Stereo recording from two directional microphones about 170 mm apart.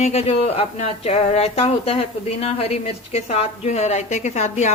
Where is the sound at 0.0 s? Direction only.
40° left (ahead or behind).